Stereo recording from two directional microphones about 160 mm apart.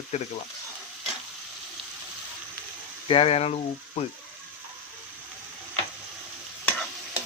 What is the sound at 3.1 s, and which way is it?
Speech, 40° left (ahead or behind).